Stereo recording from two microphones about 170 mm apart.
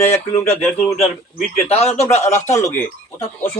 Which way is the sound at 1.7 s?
40° left (ahead or behind).